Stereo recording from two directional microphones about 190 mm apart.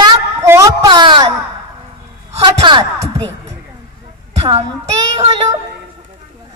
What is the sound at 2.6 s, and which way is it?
Speech, 25° right (ahead or behind).